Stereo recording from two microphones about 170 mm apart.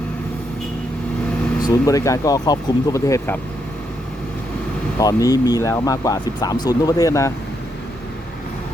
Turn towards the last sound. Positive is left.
turn(degrees=20)  # may be behind; listen again after turning